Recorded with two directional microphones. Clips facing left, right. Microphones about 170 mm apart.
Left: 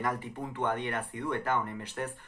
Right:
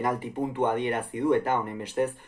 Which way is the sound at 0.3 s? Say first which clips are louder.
Right 6 dB; 20° right (ahead or behind).